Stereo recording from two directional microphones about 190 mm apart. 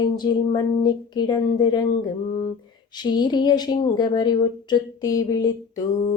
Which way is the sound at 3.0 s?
20° left (ahead or behind).